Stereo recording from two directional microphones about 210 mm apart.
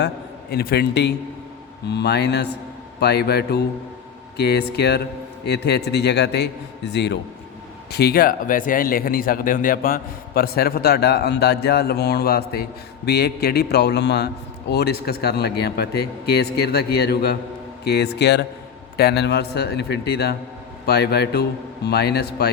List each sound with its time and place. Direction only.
0.5 s speech: 45° left (ahead or behind)